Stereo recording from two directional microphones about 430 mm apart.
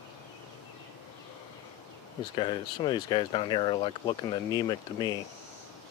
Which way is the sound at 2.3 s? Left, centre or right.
Centre.